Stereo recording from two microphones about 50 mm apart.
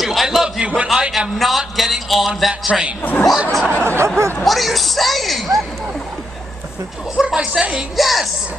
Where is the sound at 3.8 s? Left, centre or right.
Right.